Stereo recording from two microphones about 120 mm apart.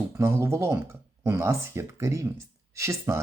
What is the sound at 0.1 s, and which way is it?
Speech, 25° right (ahead or behind).